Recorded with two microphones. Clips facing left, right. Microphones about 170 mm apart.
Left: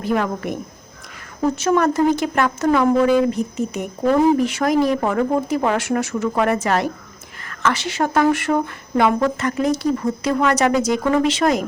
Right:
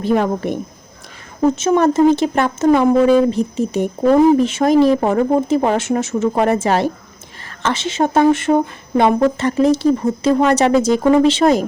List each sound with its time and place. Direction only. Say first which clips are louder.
0.0 s speech: right 4 dB; 30° right (ahead or behind)